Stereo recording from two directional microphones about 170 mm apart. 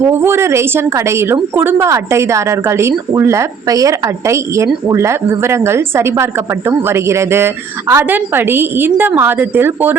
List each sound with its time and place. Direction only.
0.1 s a woman's voice: 15° right (ahead or behind)